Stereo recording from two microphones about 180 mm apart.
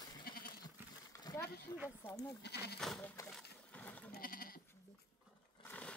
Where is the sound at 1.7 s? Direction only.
15° left (ahead or behind).